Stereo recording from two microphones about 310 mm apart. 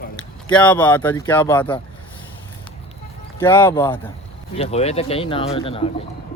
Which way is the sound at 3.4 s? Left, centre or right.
Centre.